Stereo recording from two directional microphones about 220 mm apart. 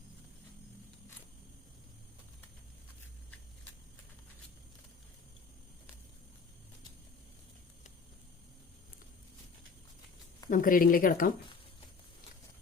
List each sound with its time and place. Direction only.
10.5 s speech: 40° left (ahead or behind)